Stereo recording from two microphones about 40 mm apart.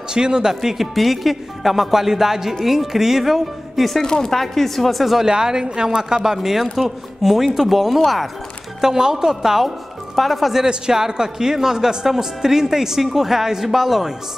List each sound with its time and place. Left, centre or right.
0.1 s speech: centre
0.6 s speech: centre
4.0 s speech: centre
5.2 s speech: centre
10.1 s speech: centre
10.6 s speech: centre